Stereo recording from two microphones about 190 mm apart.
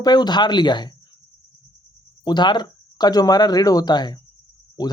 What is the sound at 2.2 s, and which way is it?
Speech, 25° left (ahead or behind).